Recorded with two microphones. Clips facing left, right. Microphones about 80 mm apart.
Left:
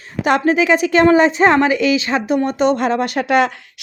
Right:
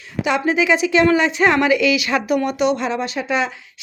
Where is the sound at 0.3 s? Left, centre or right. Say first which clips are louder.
Left 3 dB; left.